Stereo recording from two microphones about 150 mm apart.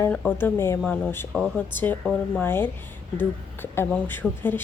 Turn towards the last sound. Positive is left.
turn(degrees=15)  # may be behind; listen again after turning